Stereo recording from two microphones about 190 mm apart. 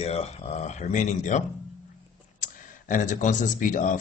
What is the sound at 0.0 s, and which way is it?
Speech, 30° left (ahead or behind).